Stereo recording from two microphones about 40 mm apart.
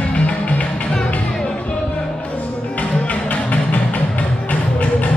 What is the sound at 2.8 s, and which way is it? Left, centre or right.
Music, left.